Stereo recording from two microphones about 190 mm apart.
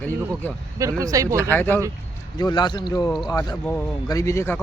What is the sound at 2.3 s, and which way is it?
Speech, 20° left (ahead or behind).